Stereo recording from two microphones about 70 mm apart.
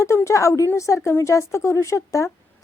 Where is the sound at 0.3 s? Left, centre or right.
Left.